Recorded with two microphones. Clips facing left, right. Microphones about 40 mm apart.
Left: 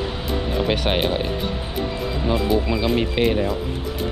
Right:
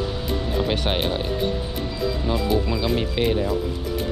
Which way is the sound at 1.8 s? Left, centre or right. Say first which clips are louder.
Left 2 dB; left.